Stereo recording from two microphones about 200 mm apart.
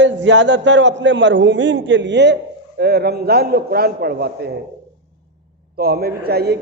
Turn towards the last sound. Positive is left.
turn(degrees=-55)  # may be behind; listen again after turning